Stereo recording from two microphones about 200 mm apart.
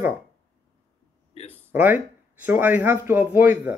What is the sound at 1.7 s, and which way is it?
Speech, 10° right (ahead or behind).